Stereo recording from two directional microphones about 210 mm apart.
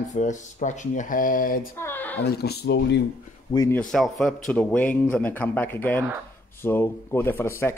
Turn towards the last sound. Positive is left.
turn(degrees=10)  # may be behind; listen again after turning